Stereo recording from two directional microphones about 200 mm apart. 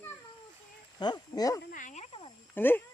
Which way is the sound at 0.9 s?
20° left (ahead or behind).